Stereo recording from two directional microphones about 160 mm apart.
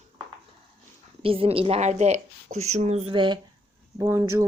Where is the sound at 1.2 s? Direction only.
35° right (ahead or behind).